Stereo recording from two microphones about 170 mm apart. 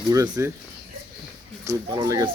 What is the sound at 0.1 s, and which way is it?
Speech, 20° right (ahead or behind).